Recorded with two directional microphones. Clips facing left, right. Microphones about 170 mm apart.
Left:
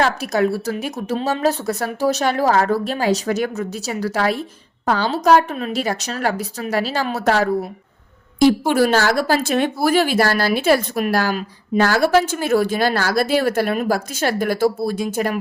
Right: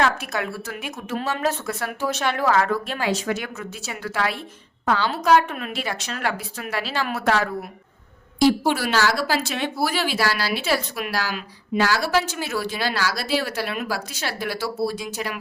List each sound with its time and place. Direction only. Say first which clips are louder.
0.0 s speech: left 5 dB; 35° left (ahead or behind)